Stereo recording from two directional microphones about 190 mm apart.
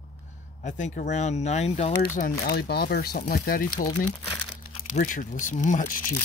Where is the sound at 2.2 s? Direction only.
55° left (ahead or behind).